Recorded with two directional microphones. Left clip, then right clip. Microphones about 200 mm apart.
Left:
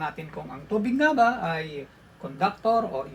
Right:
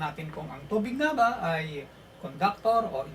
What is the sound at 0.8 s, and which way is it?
Speech, 30° left (ahead or behind).